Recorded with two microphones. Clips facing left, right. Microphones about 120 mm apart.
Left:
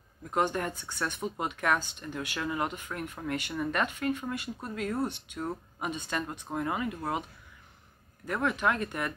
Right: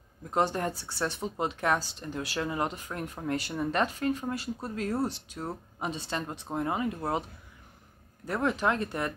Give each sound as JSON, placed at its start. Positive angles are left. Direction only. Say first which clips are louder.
{"t": 0.3, "sound": "a woman's voice", "louder": "right 1 dB", "side_deg": -30}
{"t": 8.3, "sound": "speech", "louder": "right 1 dB", "side_deg": -35}